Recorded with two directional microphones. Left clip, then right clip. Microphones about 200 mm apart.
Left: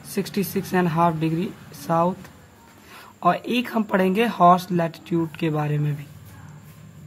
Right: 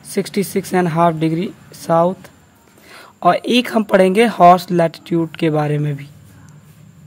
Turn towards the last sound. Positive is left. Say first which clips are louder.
# right 8 dB
turn(degrees=-40)  # may be behind; listen again after turning